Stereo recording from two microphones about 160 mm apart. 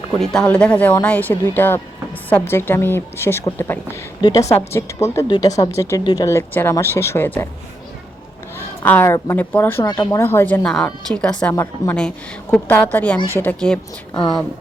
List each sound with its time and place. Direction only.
0.2 s a woman's voice: 5° left (ahead or behind)
8.5 s a woman's voice: 15° left (ahead or behind)
9.8 s a woman's voice: 25° left (ahead or behind)
10.2 s speech: 15° left (ahead or behind)